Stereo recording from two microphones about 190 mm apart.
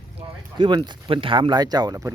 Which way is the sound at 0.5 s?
25° right (ahead or behind).